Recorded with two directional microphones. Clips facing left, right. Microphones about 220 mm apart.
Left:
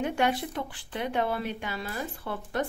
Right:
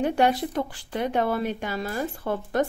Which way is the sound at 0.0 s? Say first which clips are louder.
Right 5 dB; 35° right (ahead or behind).